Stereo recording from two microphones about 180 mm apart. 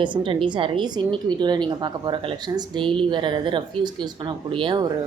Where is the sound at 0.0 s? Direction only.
25° right (ahead or behind).